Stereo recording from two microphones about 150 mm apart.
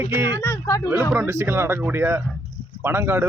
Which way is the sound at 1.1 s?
15° right (ahead or behind).